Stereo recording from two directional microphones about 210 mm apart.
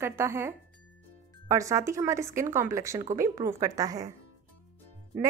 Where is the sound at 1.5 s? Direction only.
15° right (ahead or behind).